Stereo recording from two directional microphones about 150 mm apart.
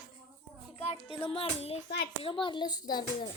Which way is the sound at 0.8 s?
40° left (ahead or behind).